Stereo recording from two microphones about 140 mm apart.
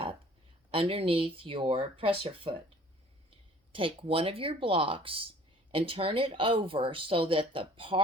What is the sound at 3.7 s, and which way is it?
Speech, 40° right (ahead or behind).